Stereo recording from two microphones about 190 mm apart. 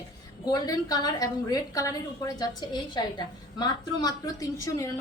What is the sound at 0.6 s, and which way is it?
A woman's voice, 20° left (ahead or behind).